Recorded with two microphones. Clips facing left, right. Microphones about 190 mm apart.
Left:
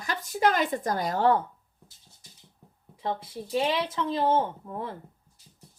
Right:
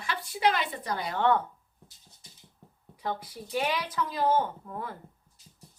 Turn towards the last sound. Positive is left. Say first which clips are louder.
# left 2 dB
turn(degrees=25)  # may be behind; listen again after turning